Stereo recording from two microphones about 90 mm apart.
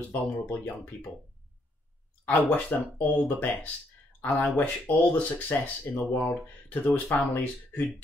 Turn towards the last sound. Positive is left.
turn(degrees=20)  # may be behind; listen again after turning